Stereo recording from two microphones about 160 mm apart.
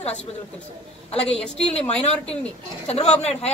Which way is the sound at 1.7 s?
40° left (ahead or behind).